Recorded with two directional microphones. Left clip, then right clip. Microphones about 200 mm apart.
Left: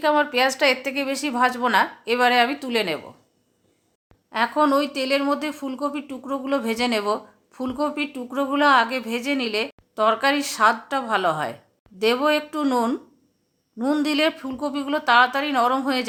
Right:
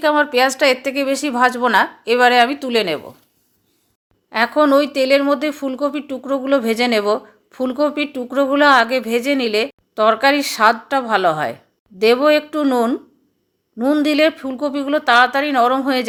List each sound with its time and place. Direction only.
0.0 s speech: 20° right (ahead or behind)
4.3 s a woman's voice: 20° right (ahead or behind)